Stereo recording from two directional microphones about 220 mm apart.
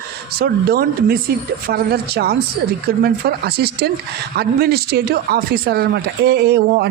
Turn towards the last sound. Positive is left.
turn(degrees=-45)  # may be behind; listen again after turning